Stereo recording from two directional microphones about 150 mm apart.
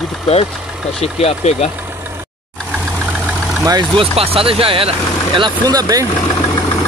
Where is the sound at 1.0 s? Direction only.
45° left (ahead or behind).